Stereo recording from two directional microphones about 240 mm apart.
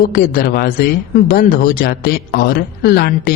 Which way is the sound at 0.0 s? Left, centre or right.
Left.